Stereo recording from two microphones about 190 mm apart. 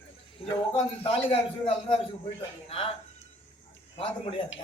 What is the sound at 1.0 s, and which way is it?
A man's voice, 30° left (ahead or behind).